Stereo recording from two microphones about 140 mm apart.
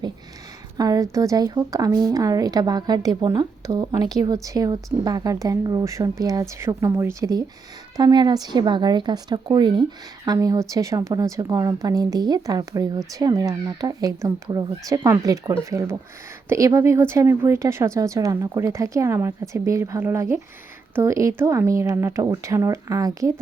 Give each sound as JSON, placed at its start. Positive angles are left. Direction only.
{"t": 0.8, "sound": "a woman's voice", "side_deg": -25}